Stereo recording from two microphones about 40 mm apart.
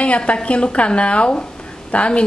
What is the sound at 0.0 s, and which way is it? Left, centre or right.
A woman's voice, left.